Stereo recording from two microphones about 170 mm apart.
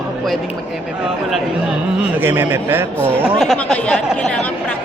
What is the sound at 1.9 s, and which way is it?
A man's voice, 10° right (ahead or behind).